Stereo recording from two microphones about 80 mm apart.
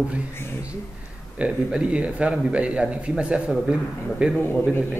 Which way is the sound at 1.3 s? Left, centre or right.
Centre.